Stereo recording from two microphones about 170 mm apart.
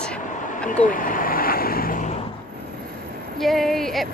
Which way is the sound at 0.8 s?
55° left (ahead or behind).